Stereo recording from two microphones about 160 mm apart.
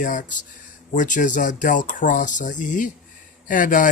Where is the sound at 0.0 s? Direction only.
55° left (ahead or behind).